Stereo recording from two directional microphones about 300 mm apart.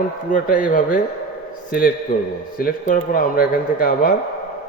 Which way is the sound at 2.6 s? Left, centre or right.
Left.